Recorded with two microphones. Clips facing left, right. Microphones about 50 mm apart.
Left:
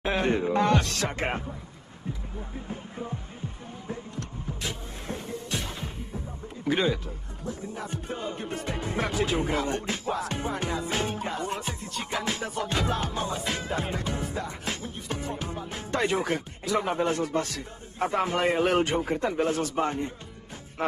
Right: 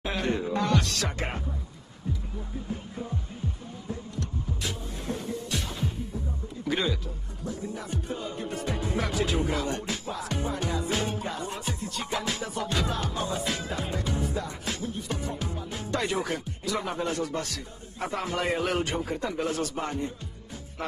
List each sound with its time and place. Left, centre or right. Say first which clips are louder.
0.0 s music: left 3 dB; left
3.8 s music: right 1 dB; left
10.0 s music: left 2 dB; left